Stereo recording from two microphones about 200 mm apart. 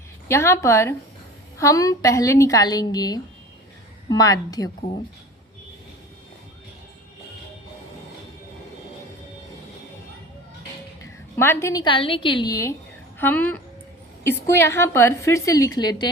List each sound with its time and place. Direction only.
0.3 s a woman's voice: 15° left (ahead or behind)
11.0 s a woman's voice: 10° left (ahead or behind)